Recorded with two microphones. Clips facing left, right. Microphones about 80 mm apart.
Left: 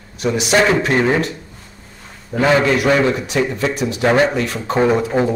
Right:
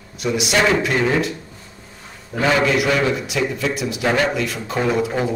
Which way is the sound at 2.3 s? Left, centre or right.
Left.